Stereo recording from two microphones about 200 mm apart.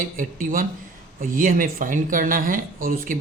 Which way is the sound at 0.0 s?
45° right (ahead or behind).